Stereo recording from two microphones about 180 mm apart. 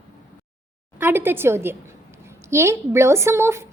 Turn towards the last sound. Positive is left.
turn(degrees=-15)  # may be behind; listen again after turning